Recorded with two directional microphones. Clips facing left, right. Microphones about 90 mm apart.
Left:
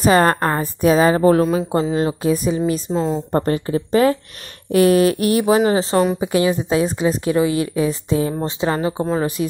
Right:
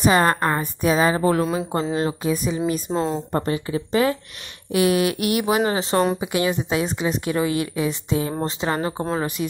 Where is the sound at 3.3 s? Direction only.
40° left (ahead or behind).